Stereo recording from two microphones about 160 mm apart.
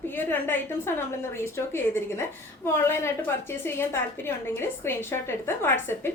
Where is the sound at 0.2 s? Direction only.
10° left (ahead or behind).